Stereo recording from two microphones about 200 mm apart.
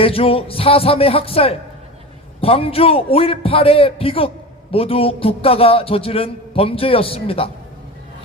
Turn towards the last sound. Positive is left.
turn(degrees=30)  # may be behind; listen again after turning